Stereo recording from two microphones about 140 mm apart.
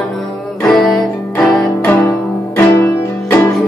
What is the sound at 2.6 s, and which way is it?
Music, 15° left (ahead or behind).